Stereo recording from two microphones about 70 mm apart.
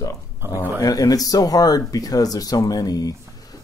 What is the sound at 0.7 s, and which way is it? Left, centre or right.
Speech, left.